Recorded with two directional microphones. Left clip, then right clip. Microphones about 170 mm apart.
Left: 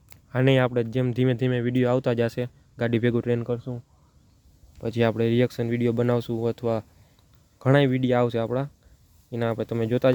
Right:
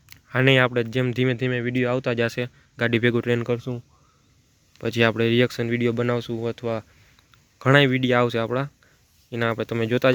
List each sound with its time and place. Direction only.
0.3 s speech: 10° left (ahead or behind); by 2.1 s 25° left (ahead or behind)
2.1 s speech: 10° left (ahead or behind)
3.4 s speech: 20° right (ahead or behind)
4.8 s speech: centre (ahead or behind); by 6.8 s 25° left (ahead or behind)
7.6 s speech: 5° left (ahead or behind)